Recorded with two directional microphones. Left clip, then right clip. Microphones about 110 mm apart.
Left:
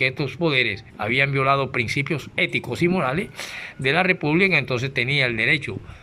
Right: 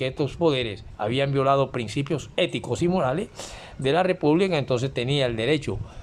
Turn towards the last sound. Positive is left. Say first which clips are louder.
# left 3 dB
turn(degrees=-45)  # may be behind; listen again after turning